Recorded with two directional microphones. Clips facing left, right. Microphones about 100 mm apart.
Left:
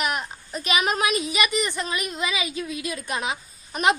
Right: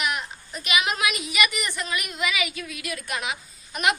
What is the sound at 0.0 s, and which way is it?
A woman's voice, 40° left (ahead or behind).